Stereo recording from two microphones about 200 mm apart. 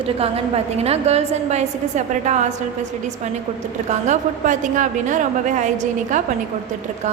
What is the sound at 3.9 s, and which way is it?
A woman's voice, 40° right (ahead or behind).